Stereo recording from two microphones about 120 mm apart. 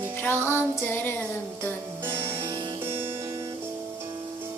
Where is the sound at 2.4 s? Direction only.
40° right (ahead or behind).